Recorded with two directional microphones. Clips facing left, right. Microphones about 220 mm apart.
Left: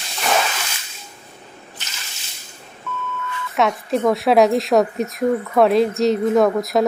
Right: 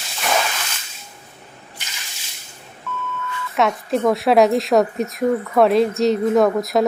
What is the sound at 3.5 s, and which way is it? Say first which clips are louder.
A woman's voice: even; centre (ahead or behind).